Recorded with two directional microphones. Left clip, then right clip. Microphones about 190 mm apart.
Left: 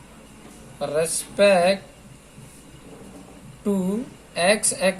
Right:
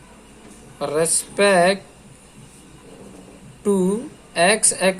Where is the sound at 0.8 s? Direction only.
45° right (ahead or behind).